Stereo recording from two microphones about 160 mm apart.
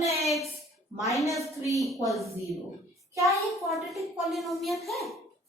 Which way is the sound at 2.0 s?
Centre (ahead or behind).